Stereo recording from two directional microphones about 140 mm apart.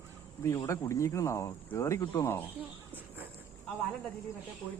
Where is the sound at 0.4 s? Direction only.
20° left (ahead or behind).